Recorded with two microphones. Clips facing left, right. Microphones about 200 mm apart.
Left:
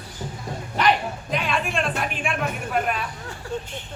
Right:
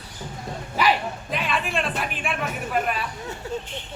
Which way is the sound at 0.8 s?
5° right (ahead or behind).